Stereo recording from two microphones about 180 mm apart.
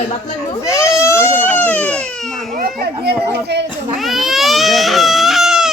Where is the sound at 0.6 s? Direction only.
15° left (ahead or behind).